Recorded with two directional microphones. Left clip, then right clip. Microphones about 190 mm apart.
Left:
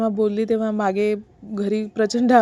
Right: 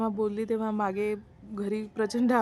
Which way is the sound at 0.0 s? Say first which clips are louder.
Left 9 dB; 20° left (ahead or behind).